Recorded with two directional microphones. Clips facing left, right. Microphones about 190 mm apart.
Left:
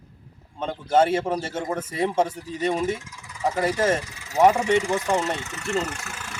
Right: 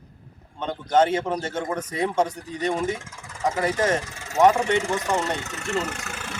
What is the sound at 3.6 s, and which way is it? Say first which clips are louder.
A man's voice: left 1 dB; 5° left (ahead or behind).